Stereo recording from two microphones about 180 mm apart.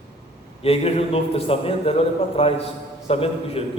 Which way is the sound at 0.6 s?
35° left (ahead or behind).